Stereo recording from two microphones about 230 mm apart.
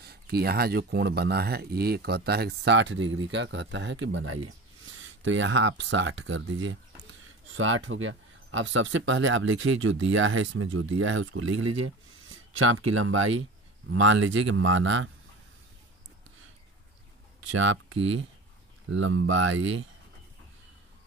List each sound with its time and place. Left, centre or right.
0.0 s speech: right
17.5 s speech: right
18.9 s speech: right